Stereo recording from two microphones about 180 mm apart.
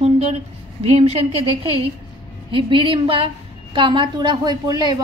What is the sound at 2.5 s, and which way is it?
A woman's voice, 30° right (ahead or behind).